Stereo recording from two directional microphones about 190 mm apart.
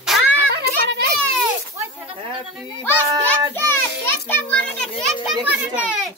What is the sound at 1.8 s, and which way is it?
Snake, 10° right (ahead or behind).